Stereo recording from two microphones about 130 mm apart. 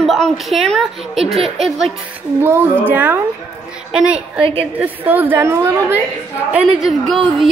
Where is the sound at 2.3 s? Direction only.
15° right (ahead or behind).